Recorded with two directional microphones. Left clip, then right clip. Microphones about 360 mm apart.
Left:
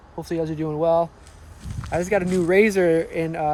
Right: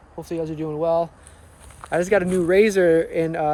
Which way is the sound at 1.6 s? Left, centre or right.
Centre.